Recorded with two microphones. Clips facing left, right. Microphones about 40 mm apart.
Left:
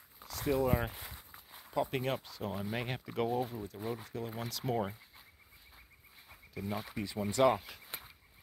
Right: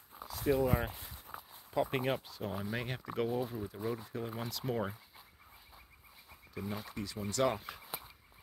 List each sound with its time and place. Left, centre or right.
0.2 s a sound: centre
0.7 s speech: centre
0.9 s walk: left
1.9 s speech: centre
6.7 s speech: centre
7.4 s a sound: centre